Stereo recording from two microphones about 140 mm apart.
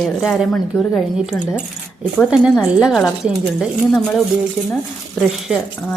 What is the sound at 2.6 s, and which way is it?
Speech, 5° right (ahead or behind).